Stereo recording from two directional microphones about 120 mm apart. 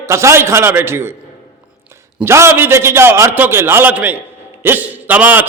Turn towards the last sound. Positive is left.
turn(degrees=-15)  # may be behind; listen again after turning